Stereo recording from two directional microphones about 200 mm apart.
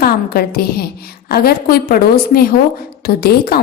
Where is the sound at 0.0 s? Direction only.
50° left (ahead or behind).